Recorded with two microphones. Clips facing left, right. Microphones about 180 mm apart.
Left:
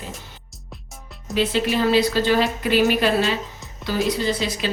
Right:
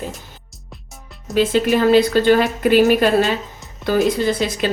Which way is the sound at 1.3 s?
45° right (ahead or behind).